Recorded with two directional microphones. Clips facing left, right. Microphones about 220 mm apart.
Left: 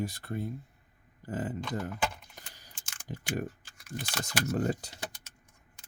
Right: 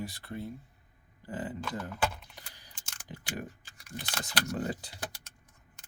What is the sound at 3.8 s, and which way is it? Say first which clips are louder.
Typing: left 2 dB; centre (ahead or behind).